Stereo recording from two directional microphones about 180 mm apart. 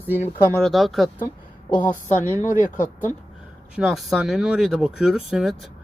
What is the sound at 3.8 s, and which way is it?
Speech, centre (ahead or behind).